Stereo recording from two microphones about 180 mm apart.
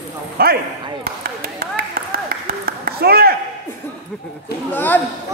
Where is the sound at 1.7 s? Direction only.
55° right (ahead or behind).